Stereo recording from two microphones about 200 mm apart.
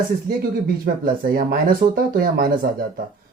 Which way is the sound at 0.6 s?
50° right (ahead or behind).